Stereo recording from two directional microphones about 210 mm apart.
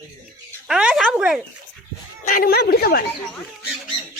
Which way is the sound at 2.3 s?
45° left (ahead or behind).